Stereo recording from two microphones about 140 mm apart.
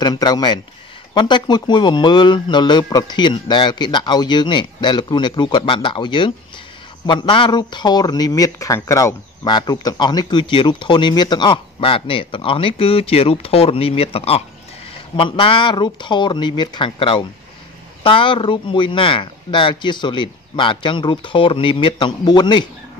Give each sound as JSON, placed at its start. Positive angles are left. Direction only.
{"t": 0.0, "sound": "speech", "side_deg": 30}